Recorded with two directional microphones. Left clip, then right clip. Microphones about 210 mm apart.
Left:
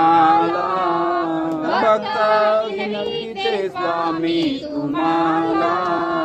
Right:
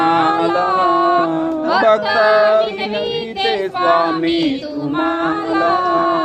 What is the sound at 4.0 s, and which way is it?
Child singing, 10° right (ahead or behind).